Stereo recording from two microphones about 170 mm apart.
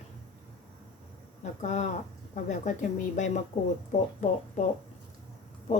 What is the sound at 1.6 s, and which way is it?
A woman's voice, 45° left (ahead or behind).